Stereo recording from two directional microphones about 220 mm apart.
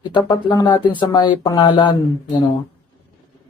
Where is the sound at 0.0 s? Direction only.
20° left (ahead or behind).